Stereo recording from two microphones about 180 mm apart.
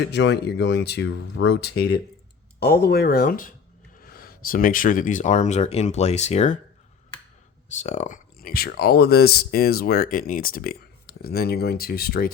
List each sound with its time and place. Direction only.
0.0 s speech: 75° left (ahead or behind); by 6.6 s 35° left (ahead or behind)
7.8 s speech: 40° left (ahead or behind); by 12.3 s 60° left (ahead or behind)